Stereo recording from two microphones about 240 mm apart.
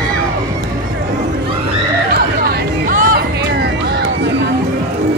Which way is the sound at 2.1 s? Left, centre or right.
Right.